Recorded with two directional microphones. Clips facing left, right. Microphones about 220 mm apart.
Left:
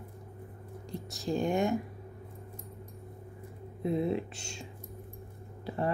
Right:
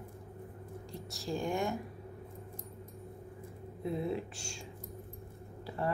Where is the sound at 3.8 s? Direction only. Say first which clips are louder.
Left 5 dB; 20° left (ahead or behind).